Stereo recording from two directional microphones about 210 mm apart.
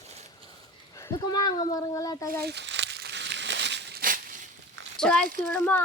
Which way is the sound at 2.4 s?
55° right (ahead or behind).